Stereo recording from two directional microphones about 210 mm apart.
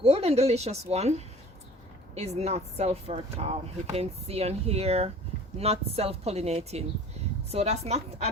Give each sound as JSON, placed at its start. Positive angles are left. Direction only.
{"t": 0.0, "sound": "speech", "side_deg": -30}